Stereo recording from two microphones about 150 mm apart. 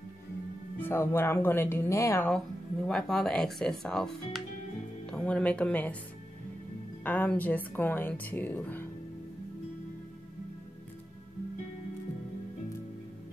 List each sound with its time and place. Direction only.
0.7 s a woman's voice: 15° left (ahead or behind)
2.9 s a woman's voice: 5° left (ahead or behind)
7.0 s a woman's voice: 10° left (ahead or behind)